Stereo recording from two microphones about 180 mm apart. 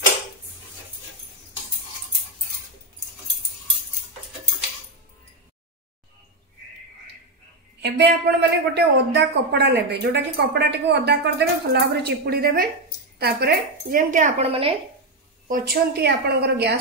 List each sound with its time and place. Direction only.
7.8 s a woman's voice: 65° right (ahead or behind)